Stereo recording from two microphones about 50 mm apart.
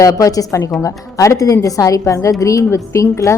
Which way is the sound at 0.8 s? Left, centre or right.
Left.